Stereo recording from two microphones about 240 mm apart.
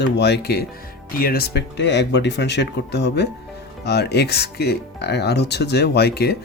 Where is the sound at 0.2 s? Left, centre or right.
Left.